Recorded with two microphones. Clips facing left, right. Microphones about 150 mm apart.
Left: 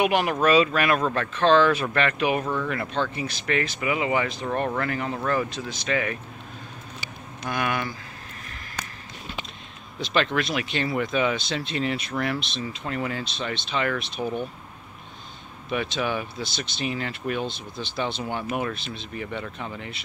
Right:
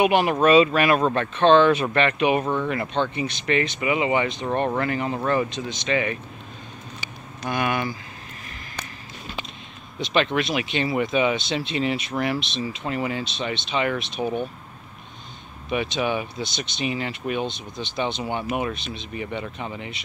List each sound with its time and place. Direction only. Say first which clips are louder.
0.0 s speech: right 3 dB; centre (ahead or behind)
2.4 s speech: right 3 dB; 20° right (ahead or behind)
2.7 s speech: right 3 dB; 5° right (ahead or behind)
7.4 s speech: right 3 dB; centre (ahead or behind)
9.9 s speech: right 2 dB; 20° right (ahead or behind)
10.5 s speech: right 2 dB; 5° right (ahead or behind)
11.1 s speech: right 3 dB; 15° right (ahead or behind)
11.7 s speech: right 2 dB; 10° right (ahead or behind)
12.4 s speech: right 3 dB; 20° right (ahead or behind)
12.6 s speech: right 2 dB; 10° right (ahead or behind)
13.2 s speech: right 2 dB; 20° right (ahead or behind)
16.0 s speech: right 2 dB; 10° right (ahead or behind)
16.8 s speech: right 2 dB; 5° right (ahead or behind)
17.1 s speech: right 2 dB; 15° right (ahead or behind)